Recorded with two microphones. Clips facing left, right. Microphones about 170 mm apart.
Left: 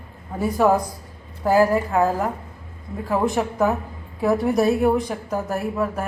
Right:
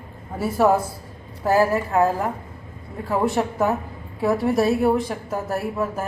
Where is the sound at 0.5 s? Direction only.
5° right (ahead or behind).